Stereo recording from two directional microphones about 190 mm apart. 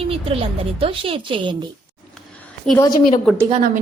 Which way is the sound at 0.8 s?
30° right (ahead or behind).